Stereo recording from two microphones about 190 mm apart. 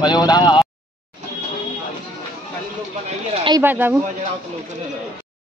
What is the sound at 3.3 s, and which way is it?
Speech, 25° right (ahead or behind).